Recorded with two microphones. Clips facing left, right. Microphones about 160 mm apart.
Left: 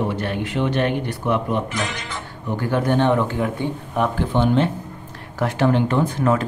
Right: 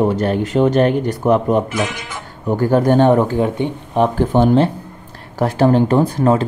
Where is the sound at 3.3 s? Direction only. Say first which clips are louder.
Right 5 dB; 25° right (ahead or behind).